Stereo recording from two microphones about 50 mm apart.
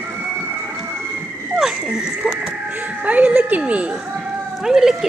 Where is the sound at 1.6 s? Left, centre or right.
Centre.